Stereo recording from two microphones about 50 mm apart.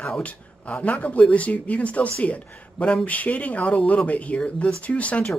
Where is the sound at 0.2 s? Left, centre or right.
Left.